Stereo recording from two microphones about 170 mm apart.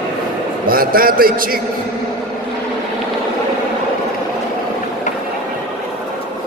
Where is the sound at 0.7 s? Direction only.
60° right (ahead or behind).